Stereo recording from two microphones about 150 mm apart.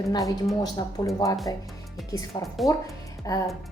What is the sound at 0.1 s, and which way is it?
A woman's voice, 20° left (ahead or behind).